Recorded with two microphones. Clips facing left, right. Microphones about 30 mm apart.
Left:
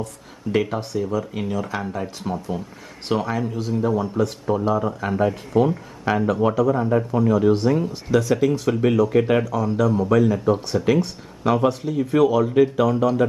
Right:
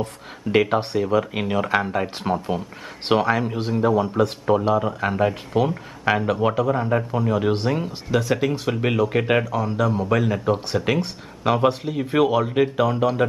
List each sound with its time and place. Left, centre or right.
0.0 s speech: right
5.3 s speech: right
6.0 s speech: right
9.4 s speech: right